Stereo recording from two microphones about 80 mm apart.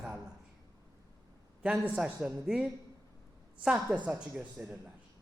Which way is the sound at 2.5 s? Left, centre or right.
Centre.